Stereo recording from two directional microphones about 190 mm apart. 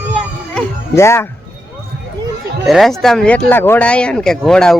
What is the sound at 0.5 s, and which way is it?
Music, 15° left (ahead or behind).